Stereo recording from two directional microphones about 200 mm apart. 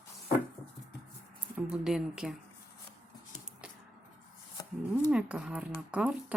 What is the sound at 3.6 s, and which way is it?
Music, 5° right (ahead or behind).